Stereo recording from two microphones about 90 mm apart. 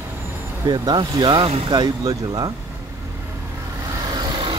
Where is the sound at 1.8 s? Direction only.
45° right (ahead or behind).